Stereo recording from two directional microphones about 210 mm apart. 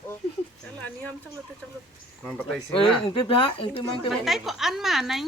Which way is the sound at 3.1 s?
25° left (ahead or behind).